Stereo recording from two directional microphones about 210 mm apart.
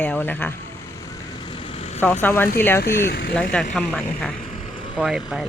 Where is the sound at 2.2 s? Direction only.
10° left (ahead or behind).